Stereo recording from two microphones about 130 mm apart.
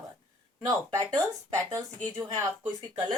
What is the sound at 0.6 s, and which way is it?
Speech, 25° right (ahead or behind).